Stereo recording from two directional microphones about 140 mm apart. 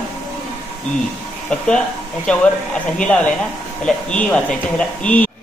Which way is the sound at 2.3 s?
5° left (ahead or behind).